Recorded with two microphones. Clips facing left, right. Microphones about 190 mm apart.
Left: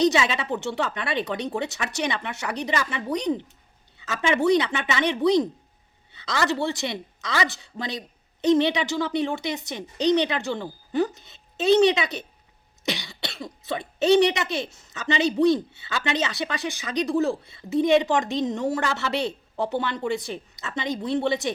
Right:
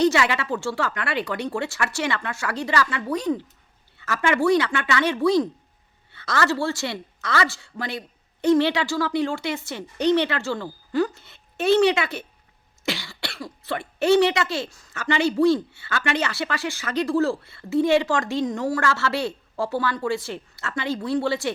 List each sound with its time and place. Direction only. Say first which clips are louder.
0.0 s speech: right 1 dB; 20° left (ahead or behind)